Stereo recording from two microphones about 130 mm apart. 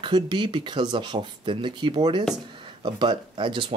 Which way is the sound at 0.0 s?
40° right (ahead or behind).